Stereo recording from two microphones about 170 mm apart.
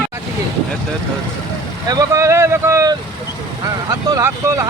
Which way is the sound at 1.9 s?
20° right (ahead or behind).